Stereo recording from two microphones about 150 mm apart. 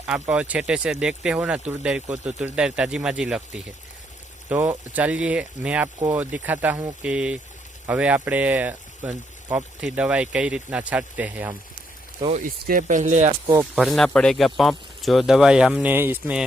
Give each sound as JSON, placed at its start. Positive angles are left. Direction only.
{"t": 0.0, "sound": "speech", "side_deg": -5}
{"t": 12.4, "sound": "speech", "side_deg": -65}
{"t": 13.7, "sound": "speech", "side_deg": 0}